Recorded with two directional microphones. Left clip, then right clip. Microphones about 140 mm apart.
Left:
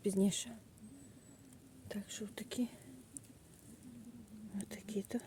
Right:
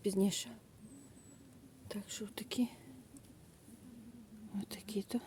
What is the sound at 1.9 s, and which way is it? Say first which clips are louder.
Speech: right 1 dB; 15° right (ahead or behind).